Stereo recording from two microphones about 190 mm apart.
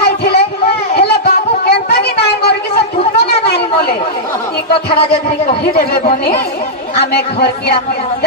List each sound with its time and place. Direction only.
0.0 s a sound: 60° left (ahead or behind)
4.8 s speech: 55° left (ahead or behind)
7.0 s speech: 60° left (ahead or behind)